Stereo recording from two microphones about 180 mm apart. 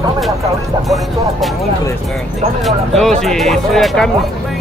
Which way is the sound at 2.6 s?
Centre (ahead or behind).